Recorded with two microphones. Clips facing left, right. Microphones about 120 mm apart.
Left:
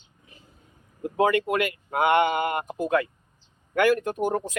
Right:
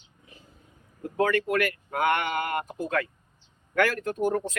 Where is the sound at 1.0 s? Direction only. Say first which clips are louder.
Left 3 dB; 20° left (ahead or behind).